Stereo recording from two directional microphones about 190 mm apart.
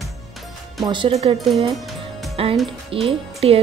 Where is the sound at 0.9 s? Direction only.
30° right (ahead or behind).